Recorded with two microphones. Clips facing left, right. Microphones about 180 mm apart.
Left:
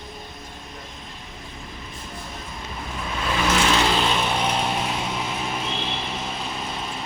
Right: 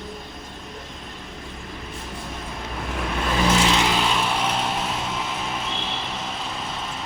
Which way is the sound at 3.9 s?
10° right (ahead or behind).